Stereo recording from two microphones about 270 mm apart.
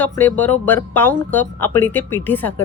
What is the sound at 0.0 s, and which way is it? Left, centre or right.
Speech, centre.